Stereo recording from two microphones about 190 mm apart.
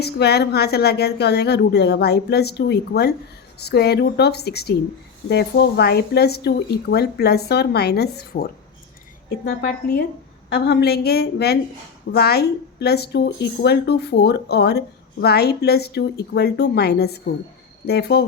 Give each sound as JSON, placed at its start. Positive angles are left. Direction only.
{"t": 0.0, "sound": "speech", "side_deg": 60}